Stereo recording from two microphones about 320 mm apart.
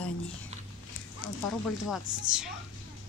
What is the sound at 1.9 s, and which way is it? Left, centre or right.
Speech, centre.